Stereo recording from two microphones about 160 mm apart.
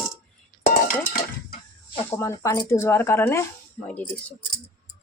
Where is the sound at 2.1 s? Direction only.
15° left (ahead or behind).